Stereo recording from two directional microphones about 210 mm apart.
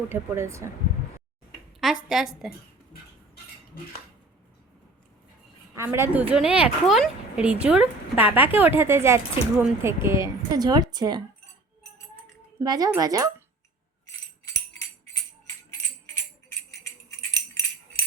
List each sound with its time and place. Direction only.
0.1 s a woman's voice: 15° right (ahead or behind)
2.0 s a woman's voice: centre (ahead or behind)
5.7 s a woman's voice: 10° right (ahead or behind)
12.5 s a woman's voice: 20° right (ahead or behind)